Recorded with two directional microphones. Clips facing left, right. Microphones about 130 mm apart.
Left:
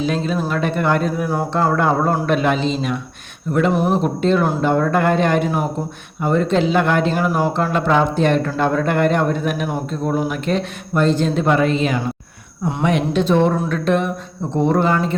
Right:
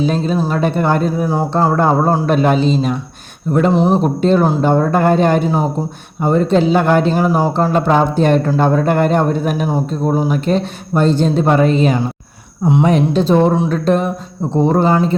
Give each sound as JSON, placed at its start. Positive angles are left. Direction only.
{"t": 0.0, "sound": "speech", "side_deg": -35}
{"t": 3.7, "sound": "speech", "side_deg": -20}
{"t": 3.9, "sound": "speech", "side_deg": -40}